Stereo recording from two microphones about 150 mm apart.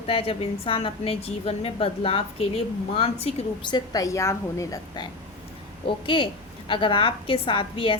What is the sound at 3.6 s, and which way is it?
A woman's voice, 25° left (ahead or behind).